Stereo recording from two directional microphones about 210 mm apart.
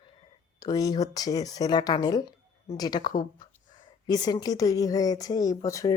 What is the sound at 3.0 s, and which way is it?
Speech, 40° left (ahead or behind).